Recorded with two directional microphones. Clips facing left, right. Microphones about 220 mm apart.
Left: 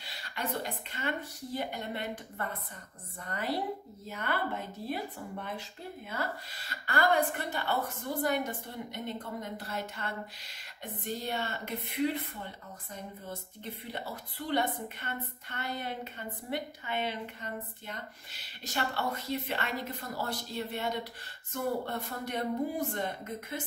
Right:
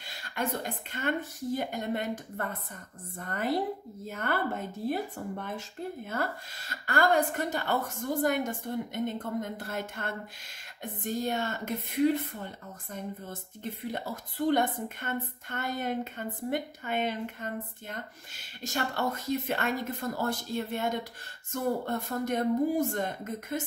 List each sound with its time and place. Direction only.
0.0 s a woman's voice: 50° right (ahead or behind)
14.1 s a woman's voice: 45° right (ahead or behind)